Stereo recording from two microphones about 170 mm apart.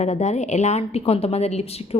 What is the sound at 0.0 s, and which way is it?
A woman's voice, 40° left (ahead or behind).